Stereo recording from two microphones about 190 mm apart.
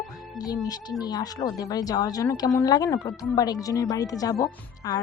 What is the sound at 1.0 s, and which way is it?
Speech, 20° left (ahead or behind).